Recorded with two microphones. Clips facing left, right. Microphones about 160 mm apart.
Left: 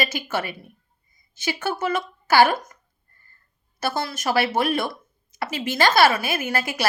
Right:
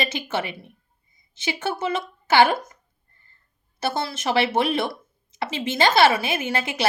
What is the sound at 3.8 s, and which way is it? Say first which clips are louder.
A woman's voice: even; 25° right (ahead or behind).